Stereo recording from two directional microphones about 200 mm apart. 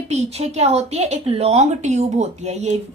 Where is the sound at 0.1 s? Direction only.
30° right (ahead or behind).